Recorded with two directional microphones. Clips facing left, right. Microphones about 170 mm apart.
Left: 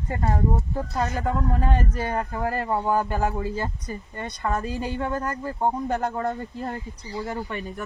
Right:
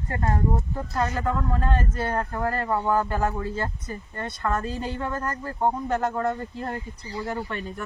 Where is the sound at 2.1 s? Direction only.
10° left (ahead or behind).